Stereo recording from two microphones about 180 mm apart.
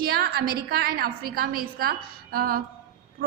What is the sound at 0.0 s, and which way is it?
A woman's voice, 55° right (ahead or behind).